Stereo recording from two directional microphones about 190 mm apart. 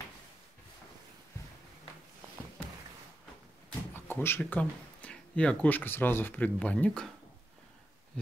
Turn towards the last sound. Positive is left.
turn(degrees=5)  # may be behind; listen again after turning